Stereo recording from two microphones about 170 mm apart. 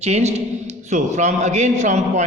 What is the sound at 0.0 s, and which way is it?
A man's voice, 40° right (ahead or behind).